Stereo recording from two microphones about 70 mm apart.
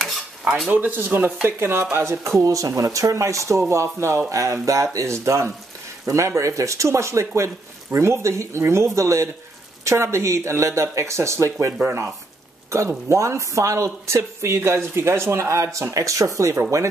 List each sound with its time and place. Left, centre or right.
0.7 s speech: right
2.4 s speech: right
4.3 s speech: right
12.7 s speech: right